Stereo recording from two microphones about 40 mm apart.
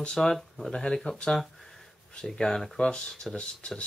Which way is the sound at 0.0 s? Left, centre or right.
Centre.